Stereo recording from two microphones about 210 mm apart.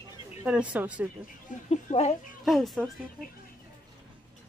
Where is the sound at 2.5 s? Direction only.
Centre (ahead or behind).